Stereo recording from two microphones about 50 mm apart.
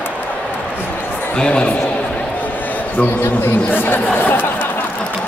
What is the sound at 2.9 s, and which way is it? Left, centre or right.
Speech, left.